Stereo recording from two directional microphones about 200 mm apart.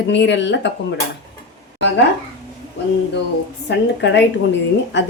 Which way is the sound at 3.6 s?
60° left (ahead or behind).